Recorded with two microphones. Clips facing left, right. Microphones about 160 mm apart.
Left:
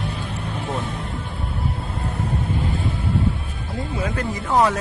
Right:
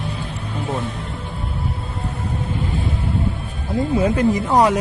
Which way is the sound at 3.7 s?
30° right (ahead or behind).